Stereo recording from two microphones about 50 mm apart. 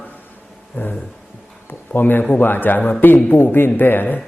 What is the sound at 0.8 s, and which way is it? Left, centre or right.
Speech, left.